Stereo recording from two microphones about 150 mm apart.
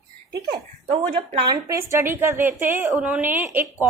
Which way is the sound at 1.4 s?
20° right (ahead or behind).